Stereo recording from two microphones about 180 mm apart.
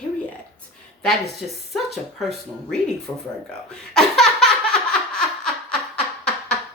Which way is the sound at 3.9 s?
5° left (ahead or behind).